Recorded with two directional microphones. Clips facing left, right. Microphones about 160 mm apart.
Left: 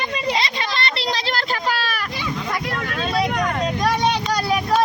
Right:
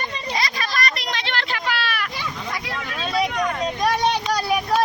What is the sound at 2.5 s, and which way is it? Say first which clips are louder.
Vehicle: left 4 dB; 55° left (ahead or behind).